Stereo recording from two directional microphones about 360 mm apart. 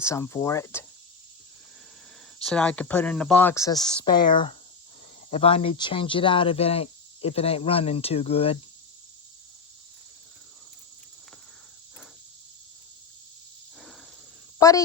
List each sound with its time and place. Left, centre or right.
0.0 s speech: centre
2.4 s speech: centre
14.6 s speech: centre